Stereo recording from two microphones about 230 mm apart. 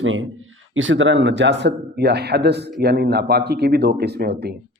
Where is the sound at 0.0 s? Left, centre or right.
Right.